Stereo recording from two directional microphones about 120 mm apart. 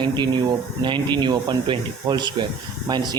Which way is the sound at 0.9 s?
40° right (ahead or behind).